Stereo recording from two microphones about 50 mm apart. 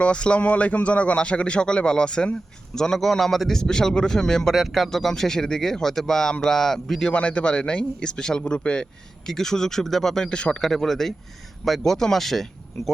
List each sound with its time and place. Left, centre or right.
0.0 s a man's voice: left
7.1 s a man's voice: left
9.2 s a man's voice: centre
10.3 s a man's voice: centre
10.6 s a man's voice: centre